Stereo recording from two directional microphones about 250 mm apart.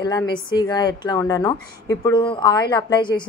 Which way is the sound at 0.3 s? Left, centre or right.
Centre.